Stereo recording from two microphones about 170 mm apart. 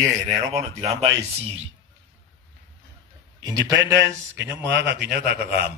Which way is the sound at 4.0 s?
90° right.